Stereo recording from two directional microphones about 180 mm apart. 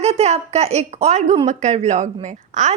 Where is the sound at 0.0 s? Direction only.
35° right (ahead or behind).